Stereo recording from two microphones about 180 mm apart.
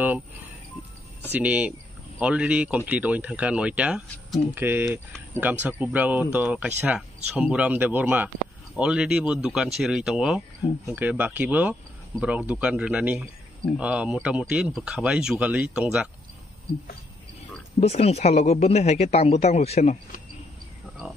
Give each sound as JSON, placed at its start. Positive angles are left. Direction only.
{"t": 1.3, "sound": "speech", "side_deg": -10}
{"t": 17.7, "sound": "speech", "side_deg": 35}